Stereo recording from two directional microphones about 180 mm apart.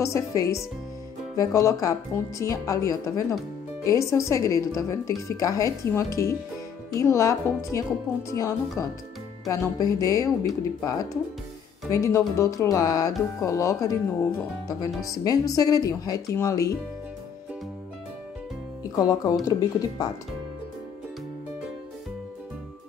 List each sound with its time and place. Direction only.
0.0 s speech: 15° left (ahead or behind)
18.9 s speech: 20° left (ahead or behind)